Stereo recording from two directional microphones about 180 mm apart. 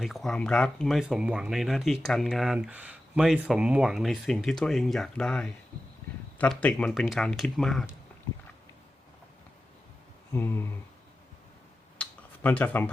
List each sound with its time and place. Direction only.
0.0 s speech: centre (ahead or behind)
10.3 s speech: 10° left (ahead or behind)
11.9 s tick-tock: 10° left (ahead or behind)